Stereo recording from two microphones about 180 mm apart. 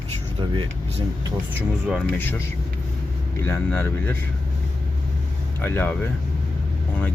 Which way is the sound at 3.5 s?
10° left (ahead or behind).